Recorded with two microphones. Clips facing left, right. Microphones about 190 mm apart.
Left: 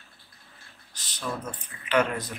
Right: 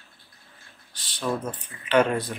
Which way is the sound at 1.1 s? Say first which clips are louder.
Right 5 dB; 30° right (ahead or behind).